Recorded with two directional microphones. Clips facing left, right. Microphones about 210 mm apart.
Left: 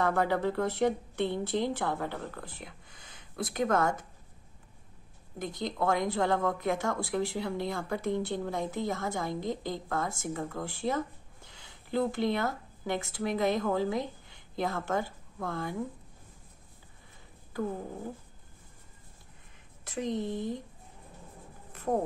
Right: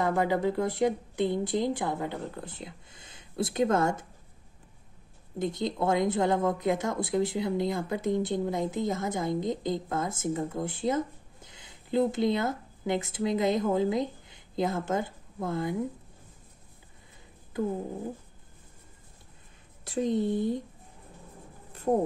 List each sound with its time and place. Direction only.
0.0 s a woman's voice: 15° right (ahead or behind)
5.4 s speech: 25° right (ahead or behind)
17.5 s cat: 20° right (ahead or behind)
19.8 s speech: 30° right (ahead or behind)